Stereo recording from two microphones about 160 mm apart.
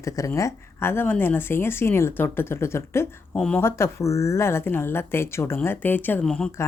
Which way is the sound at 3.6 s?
15° left (ahead or behind).